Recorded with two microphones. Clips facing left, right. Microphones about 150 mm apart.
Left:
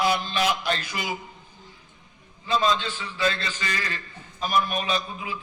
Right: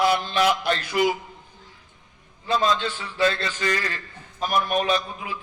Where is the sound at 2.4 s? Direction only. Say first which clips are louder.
Right 1 dB; 55° right (ahead or behind).